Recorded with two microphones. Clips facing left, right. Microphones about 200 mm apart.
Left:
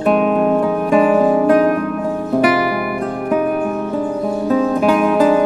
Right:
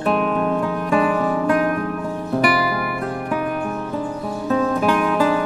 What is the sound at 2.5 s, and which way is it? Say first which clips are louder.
Music: left 5 dB; 20° left (ahead or behind).